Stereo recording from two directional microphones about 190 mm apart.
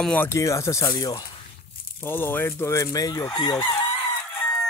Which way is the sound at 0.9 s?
20° left (ahead or behind).